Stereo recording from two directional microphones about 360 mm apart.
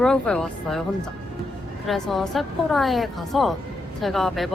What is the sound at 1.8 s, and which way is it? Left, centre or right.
A woman's voice, centre.